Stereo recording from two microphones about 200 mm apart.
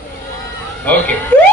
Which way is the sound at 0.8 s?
10° left (ahead or behind).